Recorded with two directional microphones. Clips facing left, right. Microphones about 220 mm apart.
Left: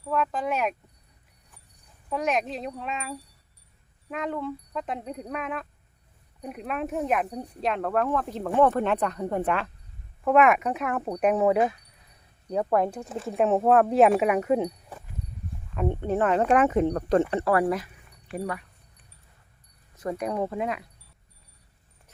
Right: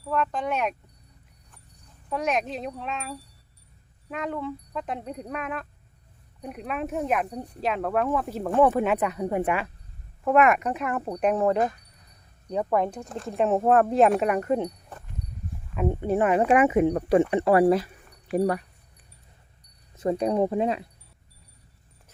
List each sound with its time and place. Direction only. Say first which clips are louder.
0.0 s speech: even; centre (ahead or behind)
2.0 s speech: even; centre (ahead or behind)
15.7 s speech: right 2 dB; 5° right (ahead or behind)
17.3 s speech: right 4 dB; 20° right (ahead or behind)
18.3 s speech: right 8 dB; 40° right (ahead or behind)
20.0 s speech: right 5 dB; 25° right (ahead or behind)